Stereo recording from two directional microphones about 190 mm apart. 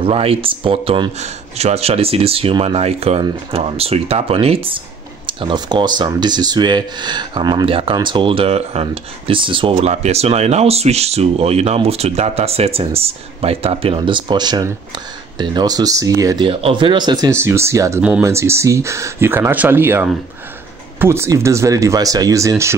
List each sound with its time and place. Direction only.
0.0 s speech: 30° right (ahead or behind)